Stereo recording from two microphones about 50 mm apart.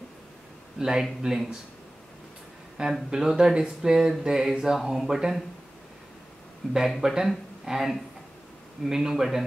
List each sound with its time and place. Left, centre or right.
0.7 s speech: centre
2.8 s speech: centre
7.0 s speech: centre